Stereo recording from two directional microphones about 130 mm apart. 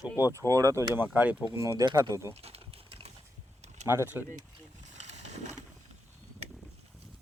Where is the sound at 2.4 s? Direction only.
50° right (ahead or behind).